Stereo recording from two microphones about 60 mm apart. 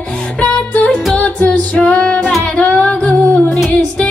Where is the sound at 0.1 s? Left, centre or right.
Left.